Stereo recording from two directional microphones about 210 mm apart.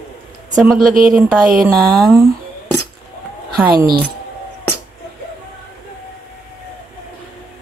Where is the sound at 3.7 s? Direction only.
45° right (ahead or behind).